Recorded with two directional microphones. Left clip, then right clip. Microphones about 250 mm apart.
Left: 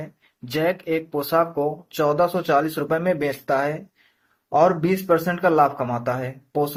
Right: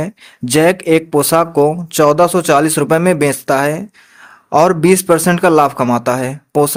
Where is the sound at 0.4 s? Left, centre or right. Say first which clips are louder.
Right 11 dB; right.